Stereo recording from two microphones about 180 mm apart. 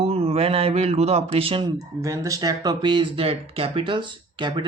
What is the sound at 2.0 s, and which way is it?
Speech, 15° right (ahead or behind).